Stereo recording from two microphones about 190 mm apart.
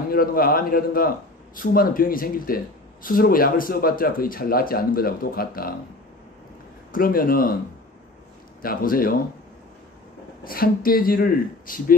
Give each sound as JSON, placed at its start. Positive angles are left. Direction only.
{"t": 0.1, "sound": "a man's voice", "side_deg": 50}
{"t": 6.9, "sound": "a man's voice", "side_deg": 50}
{"t": 8.6, "sound": "a man's voice", "side_deg": 50}
{"t": 10.4, "sound": "a man's voice", "side_deg": 50}